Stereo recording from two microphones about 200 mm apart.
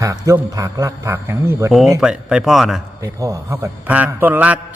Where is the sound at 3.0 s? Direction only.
15° right (ahead or behind).